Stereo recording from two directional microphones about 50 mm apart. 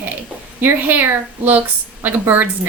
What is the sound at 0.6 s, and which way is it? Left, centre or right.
A woman's voice, right.